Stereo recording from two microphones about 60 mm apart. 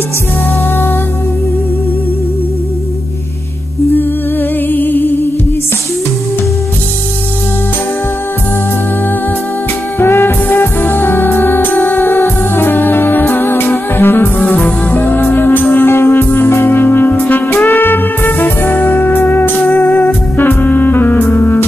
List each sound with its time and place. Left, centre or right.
3.9 s music: left
9.9 s music: left
14.4 s music: left